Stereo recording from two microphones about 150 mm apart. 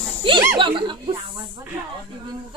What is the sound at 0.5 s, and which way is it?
Speech, 35° right (ahead or behind).